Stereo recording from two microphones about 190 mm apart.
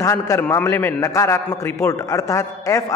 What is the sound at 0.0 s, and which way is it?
A man's voice, 15° left (ahead or behind).